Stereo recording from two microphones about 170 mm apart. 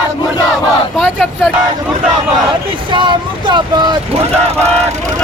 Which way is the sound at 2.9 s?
30° right (ahead or behind).